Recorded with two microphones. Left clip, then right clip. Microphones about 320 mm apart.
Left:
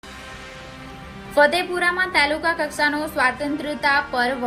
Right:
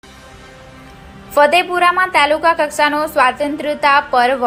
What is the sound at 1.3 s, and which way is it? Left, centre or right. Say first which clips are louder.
A woman's voice: right 6 dB; right.